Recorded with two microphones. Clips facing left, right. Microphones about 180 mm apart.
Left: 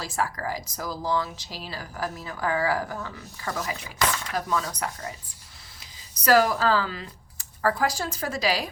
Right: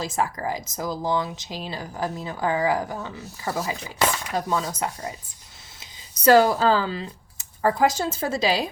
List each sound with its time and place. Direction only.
0.0 s speech: 20° right (ahead or behind)